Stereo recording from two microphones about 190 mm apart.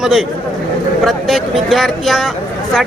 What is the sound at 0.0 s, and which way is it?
Speech, centre (ahead or behind).